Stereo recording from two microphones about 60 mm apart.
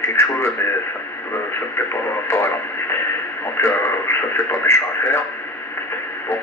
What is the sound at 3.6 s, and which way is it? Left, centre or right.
Speech, left.